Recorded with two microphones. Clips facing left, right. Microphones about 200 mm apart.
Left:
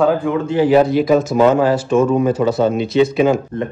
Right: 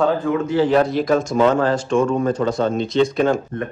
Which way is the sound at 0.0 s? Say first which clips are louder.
Left 3 dB; 5° left (ahead or behind).